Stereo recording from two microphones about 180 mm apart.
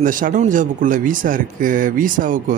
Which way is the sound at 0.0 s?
50° right (ahead or behind).